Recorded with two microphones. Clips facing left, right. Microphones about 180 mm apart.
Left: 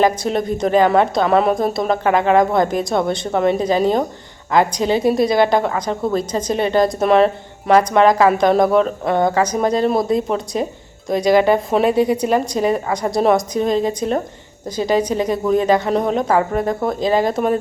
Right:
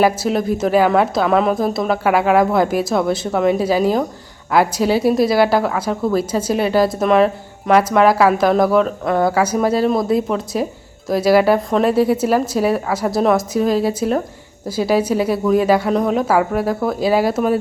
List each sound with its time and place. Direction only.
0.0 s a woman's voice: 5° right (ahead or behind)